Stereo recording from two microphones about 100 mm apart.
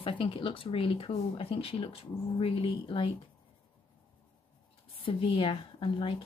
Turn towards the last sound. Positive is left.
turn(degrees=60)  # may be behind; listen again after turning